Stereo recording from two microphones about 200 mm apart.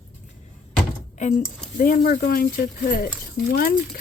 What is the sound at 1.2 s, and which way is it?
Speech, 35° left (ahead or behind).